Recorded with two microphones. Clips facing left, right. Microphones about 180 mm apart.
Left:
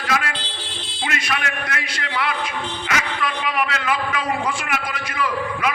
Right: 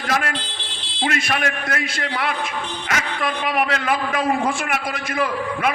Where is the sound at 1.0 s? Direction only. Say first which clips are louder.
Right 4 dB; 45° right (ahead or behind).